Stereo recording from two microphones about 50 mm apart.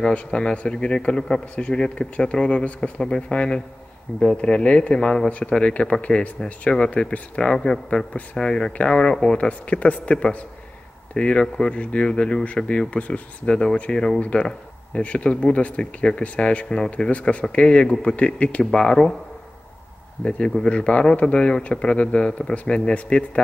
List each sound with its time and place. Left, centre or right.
0.0 s speech: left
9.5 s speech: left
11.1 s speech: centre
11.7 s speech: left
14.2 s speech: left
16.6 s speech: centre
16.9 s speech: left
18.6 s speech: centre
20.2 s speech: centre